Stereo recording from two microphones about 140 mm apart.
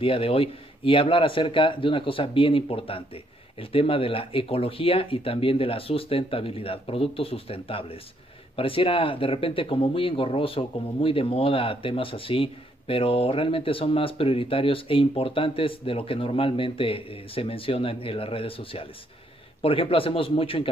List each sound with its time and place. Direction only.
0.0 s speech: 40° left (ahead or behind)